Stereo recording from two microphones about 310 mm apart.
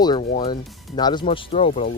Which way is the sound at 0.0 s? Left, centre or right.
Centre.